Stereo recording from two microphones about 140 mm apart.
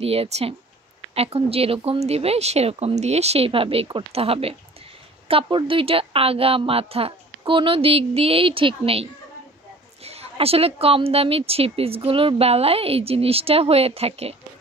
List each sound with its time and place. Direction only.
0.0 s a woman's voice: 45° right (ahead or behind)